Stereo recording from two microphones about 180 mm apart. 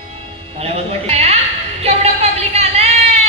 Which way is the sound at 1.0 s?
35° right (ahead or behind).